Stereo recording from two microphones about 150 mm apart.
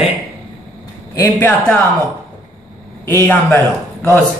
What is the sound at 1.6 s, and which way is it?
Speech, 5° left (ahead or behind).